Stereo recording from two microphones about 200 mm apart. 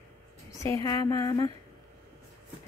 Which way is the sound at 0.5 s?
15° left (ahead or behind).